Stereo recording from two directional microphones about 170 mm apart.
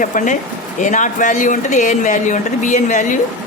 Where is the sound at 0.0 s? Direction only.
50° left (ahead or behind).